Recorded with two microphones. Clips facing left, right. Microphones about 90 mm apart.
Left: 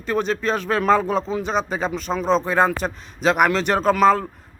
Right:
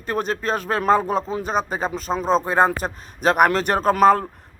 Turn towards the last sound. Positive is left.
turn(degrees=-45)  # may be behind; listen again after turning